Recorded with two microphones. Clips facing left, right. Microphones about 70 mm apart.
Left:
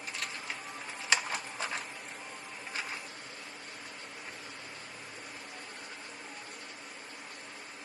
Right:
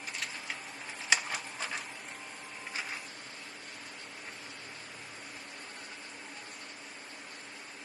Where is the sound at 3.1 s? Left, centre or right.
Left.